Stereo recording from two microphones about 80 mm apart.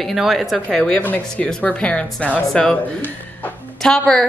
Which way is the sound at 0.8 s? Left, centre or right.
Centre.